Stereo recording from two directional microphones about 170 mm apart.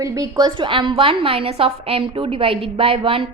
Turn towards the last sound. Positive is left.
turn(degrees=-30)  # may be behind; listen again after turning